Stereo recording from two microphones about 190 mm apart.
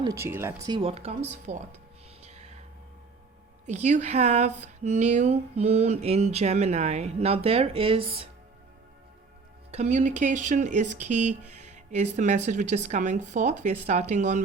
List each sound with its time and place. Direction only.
0.0 s speech: 15° right (ahead or behind)
0.8 s speech: 30° right (ahead or behind)
2.2 s a sound: 35° right (ahead or behind)
3.7 s speech: 40° right (ahead or behind)
9.7 s speech: 35° right (ahead or behind)